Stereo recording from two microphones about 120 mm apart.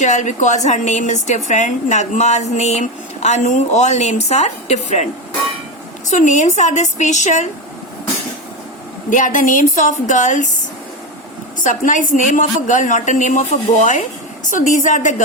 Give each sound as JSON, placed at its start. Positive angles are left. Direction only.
{"t": 0.0, "sound": "a woman's voice", "side_deg": 90}
{"t": 6.1, "sound": "a woman's voice", "side_deg": 90}
{"t": 9.0, "sound": "a woman's voice", "side_deg": 90}
{"t": 11.6, "sound": "a woman's voice", "side_deg": 90}